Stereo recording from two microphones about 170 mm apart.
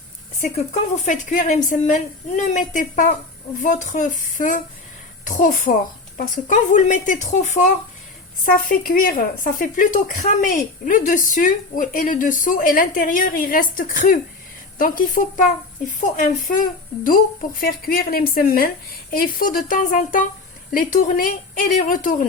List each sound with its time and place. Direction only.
0.5 s speech: 45° left (ahead or behind)